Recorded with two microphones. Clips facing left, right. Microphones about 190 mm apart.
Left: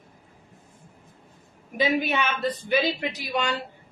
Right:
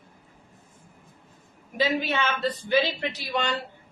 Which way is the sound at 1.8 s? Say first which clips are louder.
Left 1 dB; 15° left (ahead or behind).